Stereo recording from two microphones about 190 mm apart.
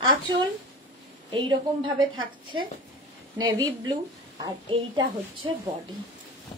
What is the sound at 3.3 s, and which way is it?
A woman's voice, 20° right (ahead or behind).